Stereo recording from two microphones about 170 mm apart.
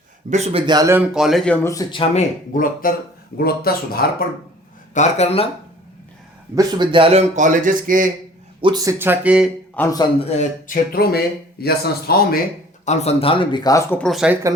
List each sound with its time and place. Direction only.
0.3 s speech: 40° right (ahead or behind)
0.6 s speech: 25° right (ahead or behind)
1.1 s speech: centre (ahead or behind)
1.9 s speech: 30° left (ahead or behind)
2.5 s speech: 55° left (ahead or behind)
4.9 s speech: 40° left (ahead or behind)
6.6 s a man's voice: 25° right (ahead or behind); by 8.1 s 50° right (ahead or behind)
8.6 s speech: 20° right (ahead or behind)
9.8 s speech: 10° left (ahead or behind)
10.2 s speech: 40° left (ahead or behind)
10.9 s speech: 65° left (ahead or behind)
12.8 s speech: 40° left (ahead or behind); by 14.0 s 20° left (ahead or behind)
14.0 s speech: centre (ahead or behind)